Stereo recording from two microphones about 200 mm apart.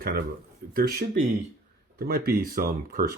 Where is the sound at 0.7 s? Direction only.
50° right (ahead or behind).